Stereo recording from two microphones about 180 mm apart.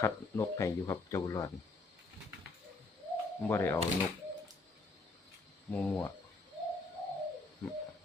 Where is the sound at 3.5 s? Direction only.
15° left (ahead or behind).